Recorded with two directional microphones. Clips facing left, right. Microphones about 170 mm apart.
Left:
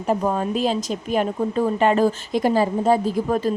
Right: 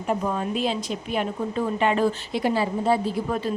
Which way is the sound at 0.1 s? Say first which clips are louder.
Left 4 dB; 40° left (ahead or behind).